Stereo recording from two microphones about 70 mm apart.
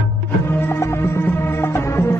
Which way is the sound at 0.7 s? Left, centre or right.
Left.